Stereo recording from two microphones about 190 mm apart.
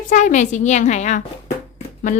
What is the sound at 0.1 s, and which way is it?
A child's voice, 40° left (ahead or behind).